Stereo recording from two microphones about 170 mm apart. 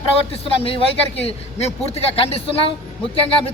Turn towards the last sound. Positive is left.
turn(degrees=35)  # may be behind; listen again after turning